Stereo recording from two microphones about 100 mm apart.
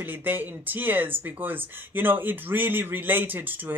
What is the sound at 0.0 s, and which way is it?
Speech, 20° right (ahead or behind).